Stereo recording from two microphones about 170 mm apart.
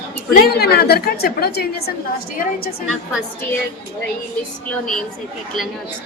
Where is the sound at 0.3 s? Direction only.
65° left (ahead or behind).